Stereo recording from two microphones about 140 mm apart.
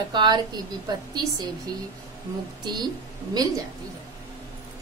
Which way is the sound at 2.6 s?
30° right (ahead or behind).